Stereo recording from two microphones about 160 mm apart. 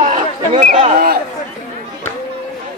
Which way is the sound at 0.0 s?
50° right (ahead or behind).